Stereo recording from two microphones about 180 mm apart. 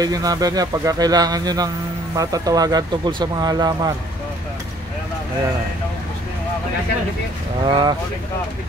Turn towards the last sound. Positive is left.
turn(degrees=-25)  # may be behind; listen again after turning